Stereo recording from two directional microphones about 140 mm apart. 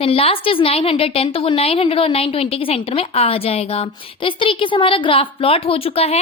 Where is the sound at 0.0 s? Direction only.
45° left (ahead or behind).